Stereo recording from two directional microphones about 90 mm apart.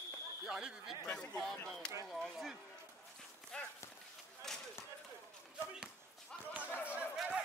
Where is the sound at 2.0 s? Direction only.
5° left (ahead or behind).